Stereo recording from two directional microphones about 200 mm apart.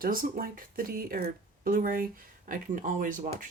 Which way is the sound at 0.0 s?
45° right (ahead or behind).